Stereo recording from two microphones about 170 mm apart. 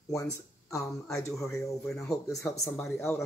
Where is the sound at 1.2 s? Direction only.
20° left (ahead or behind).